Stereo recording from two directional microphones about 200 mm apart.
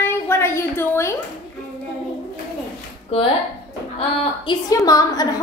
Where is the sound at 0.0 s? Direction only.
10° left (ahead or behind).